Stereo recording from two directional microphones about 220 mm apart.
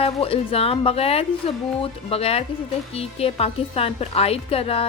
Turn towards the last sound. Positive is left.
turn(degrees=25)  # may be behind; listen again after turning